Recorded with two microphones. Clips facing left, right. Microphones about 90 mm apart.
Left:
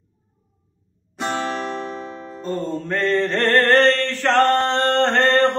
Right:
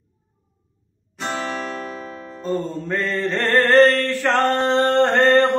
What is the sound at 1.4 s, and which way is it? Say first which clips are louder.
Music: left 2 dB; 25° left (ahead or behind).